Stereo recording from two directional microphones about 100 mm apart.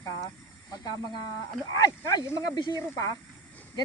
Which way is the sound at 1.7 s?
35° left (ahead or behind).